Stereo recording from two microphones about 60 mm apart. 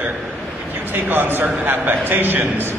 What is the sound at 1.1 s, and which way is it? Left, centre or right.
A man's voice, right.